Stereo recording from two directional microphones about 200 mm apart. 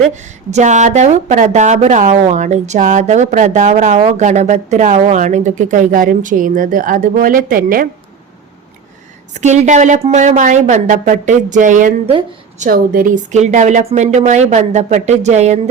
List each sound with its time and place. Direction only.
0.2 s a woman's voice: 35° right (ahead or behind)
9.3 s a woman's voice: 35° right (ahead or behind)